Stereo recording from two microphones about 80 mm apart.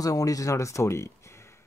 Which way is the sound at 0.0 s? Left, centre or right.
Left.